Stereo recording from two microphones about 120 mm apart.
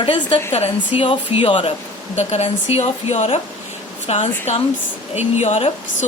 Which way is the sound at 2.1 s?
65° left (ahead or behind).